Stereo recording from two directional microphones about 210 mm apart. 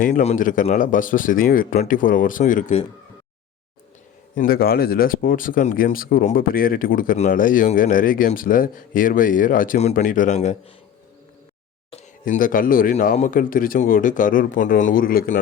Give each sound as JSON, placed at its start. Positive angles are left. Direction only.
{"t": 0.0, "sound": "speech", "side_deg": 35}
{"t": 4.4, "sound": "speech", "side_deg": 45}
{"t": 12.2, "sound": "speech", "side_deg": 40}